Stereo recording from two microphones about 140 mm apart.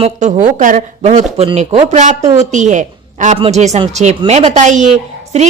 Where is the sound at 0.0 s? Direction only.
55° right (ahead or behind).